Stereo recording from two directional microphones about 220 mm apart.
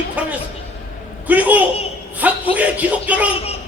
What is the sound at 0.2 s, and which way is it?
Speech, 5° right (ahead or behind).